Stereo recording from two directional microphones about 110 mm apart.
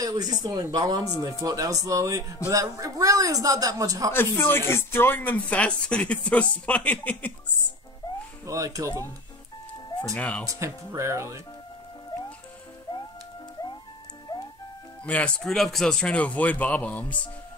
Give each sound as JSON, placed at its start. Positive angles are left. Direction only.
{"t": 0.0, "sound": "speech", "side_deg": -35}
{"t": 4.1, "sound": "speech", "side_deg": 20}
{"t": 8.5, "sound": "speech", "side_deg": -30}
{"t": 10.1, "sound": "speech", "side_deg": 10}
{"t": 10.5, "sound": "speech", "side_deg": -25}
{"t": 14.3, "sound": "music", "side_deg": 35}
{"t": 15.0, "sound": "speech", "side_deg": 10}